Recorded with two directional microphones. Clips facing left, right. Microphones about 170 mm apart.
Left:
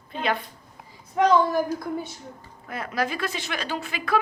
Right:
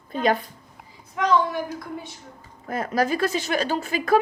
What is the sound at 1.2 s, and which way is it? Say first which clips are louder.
Speech: left 2 dB; 35° left (ahead or behind).